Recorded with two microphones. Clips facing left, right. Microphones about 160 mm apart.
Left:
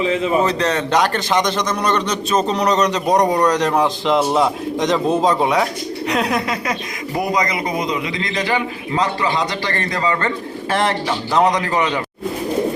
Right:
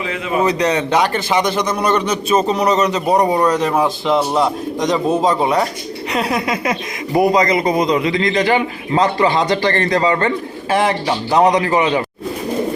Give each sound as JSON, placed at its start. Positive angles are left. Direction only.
{"t": 0.4, "sound": "a man's voice", "side_deg": -10}
{"t": 7.2, "sound": "a man's voice", "side_deg": -30}